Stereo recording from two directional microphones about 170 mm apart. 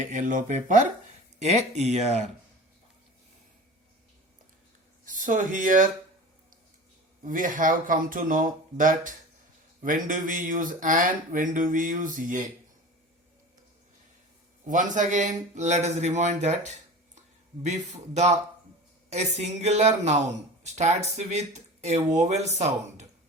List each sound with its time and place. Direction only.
0.0 s speech: 45° right (ahead or behind)
5.0 s speech: 50° right (ahead or behind)
7.2 s speech: 50° right (ahead or behind)
14.6 s speech: 50° right (ahead or behind)